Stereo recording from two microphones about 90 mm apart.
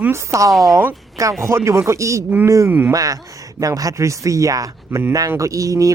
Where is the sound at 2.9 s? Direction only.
40° right (ahead or behind).